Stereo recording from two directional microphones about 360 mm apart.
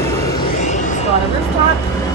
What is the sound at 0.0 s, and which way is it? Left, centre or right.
Vehicle, centre.